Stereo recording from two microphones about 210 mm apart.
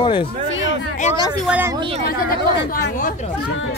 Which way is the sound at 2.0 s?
45° left (ahead or behind).